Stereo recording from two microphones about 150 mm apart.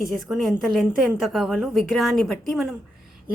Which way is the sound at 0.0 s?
Centre (ahead or behind).